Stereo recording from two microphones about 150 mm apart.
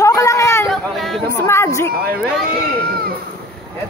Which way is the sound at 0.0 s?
20° left (ahead or behind).